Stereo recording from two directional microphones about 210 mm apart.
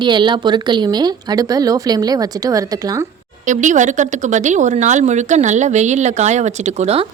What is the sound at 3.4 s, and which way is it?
Speech, 35° right (ahead or behind).